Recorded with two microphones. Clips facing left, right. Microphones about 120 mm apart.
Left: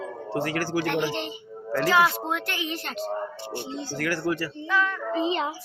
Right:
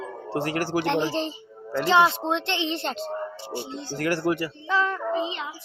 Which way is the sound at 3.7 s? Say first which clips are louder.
Left 1 dB; 5° left (ahead or behind).